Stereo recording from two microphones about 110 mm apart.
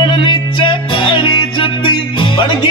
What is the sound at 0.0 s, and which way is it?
Music, 45° left (ahead or behind).